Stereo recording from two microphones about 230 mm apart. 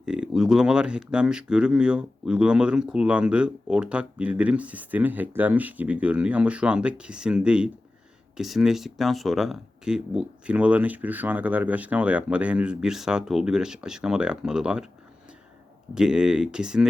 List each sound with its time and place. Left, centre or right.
0.0 s speech: centre
16.0 s speech: centre